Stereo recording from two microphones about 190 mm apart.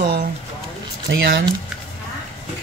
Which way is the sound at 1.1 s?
90° right.